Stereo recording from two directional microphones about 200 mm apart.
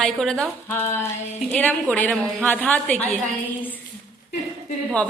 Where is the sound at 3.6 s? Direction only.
10° left (ahead or behind).